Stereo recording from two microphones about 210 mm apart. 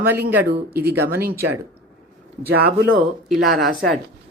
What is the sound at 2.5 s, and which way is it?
Speech, 50° right (ahead or behind).